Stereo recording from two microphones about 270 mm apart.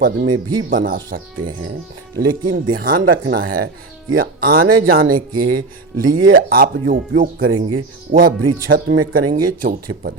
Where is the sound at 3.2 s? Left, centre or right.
Right.